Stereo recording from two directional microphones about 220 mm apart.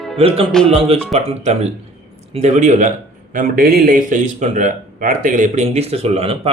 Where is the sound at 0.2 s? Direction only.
25° right (ahead or behind).